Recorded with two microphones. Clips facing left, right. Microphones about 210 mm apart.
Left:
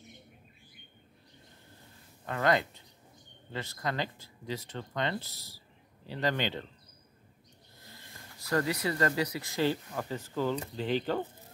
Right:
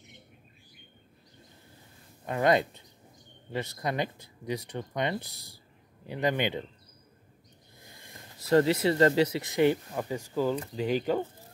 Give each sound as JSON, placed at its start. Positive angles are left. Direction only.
{"t": 2.2, "sound": "speech", "side_deg": -20}
{"t": 8.1, "sound": "speech", "side_deg": -25}